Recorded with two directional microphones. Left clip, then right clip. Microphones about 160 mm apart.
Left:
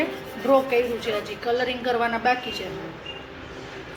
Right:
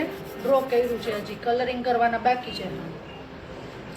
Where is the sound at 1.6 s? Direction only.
20° left (ahead or behind).